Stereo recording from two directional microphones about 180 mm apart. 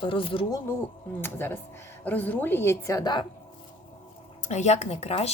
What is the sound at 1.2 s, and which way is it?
A woman's voice, 10° left (ahead or behind).